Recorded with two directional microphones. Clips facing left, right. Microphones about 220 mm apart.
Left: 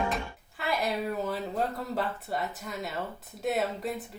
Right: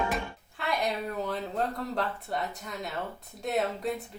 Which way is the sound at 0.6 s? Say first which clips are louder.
Left 1 dB; 5° left (ahead or behind).